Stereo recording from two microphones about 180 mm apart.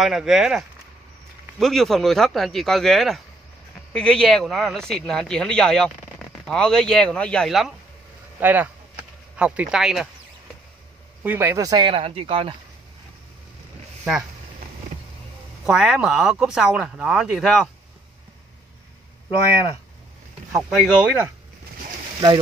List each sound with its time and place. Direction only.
0.0 s speech: centre (ahead or behind)
11.2 s speech: 15° right (ahead or behind)
11.9 s speech: 30° right (ahead or behind)
15.6 s speech: centre (ahead or behind)
20.5 s speech: 5° right (ahead or behind)